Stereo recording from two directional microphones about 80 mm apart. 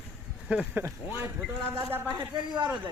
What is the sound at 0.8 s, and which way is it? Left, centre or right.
Speech, right.